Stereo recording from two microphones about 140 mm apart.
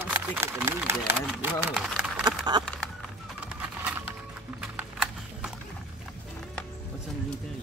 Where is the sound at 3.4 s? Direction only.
10° right (ahead or behind).